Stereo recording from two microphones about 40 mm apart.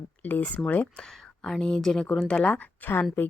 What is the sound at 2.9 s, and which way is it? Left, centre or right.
Speech, left.